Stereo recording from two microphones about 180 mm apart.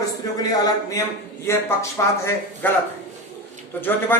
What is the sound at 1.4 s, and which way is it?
Speech, 15° left (ahead or behind).